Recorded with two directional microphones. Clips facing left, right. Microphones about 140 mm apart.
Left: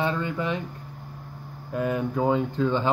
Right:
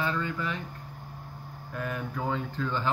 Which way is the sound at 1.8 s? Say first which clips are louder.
Left 9 dB; 25° left (ahead or behind).